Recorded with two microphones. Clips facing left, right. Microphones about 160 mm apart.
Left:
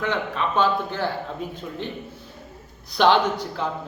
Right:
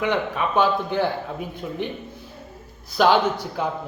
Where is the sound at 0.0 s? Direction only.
15° right (ahead or behind).